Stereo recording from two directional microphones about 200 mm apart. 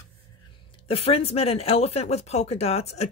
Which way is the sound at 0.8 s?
30° left (ahead or behind).